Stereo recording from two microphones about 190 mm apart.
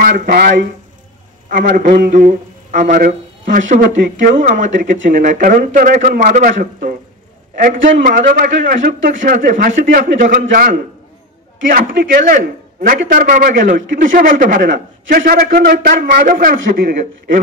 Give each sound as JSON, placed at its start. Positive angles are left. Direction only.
{"t": 0.0, "sound": "speech", "side_deg": -50}
{"t": 1.7, "sound": "speech", "side_deg": -45}